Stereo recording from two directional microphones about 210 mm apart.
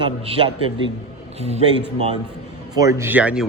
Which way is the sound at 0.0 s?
25° right (ahead or behind).